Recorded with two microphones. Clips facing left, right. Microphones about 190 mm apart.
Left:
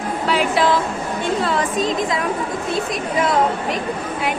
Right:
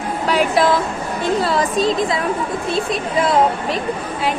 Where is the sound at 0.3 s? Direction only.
45° right (ahead or behind).